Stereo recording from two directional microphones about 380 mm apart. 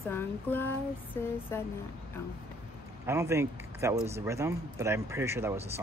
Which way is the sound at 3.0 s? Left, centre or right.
Centre.